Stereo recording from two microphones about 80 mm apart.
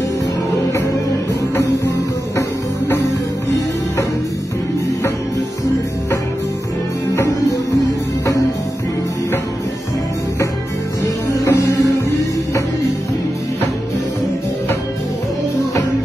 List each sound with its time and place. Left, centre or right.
7.2 s music: left
11.4 s music: left